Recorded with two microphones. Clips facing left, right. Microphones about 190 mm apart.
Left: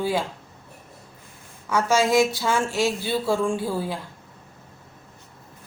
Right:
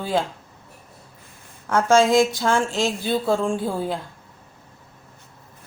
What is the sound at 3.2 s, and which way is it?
Speech, 20° right (ahead or behind).